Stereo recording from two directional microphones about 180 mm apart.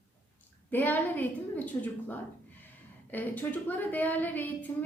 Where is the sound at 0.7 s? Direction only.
10° left (ahead or behind).